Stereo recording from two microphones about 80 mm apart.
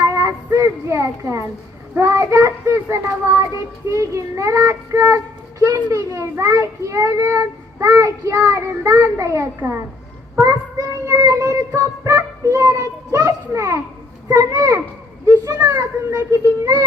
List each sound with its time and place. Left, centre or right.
0.0 s child singing: right
15.5 s a child's voice: right
15.8 s child singing: right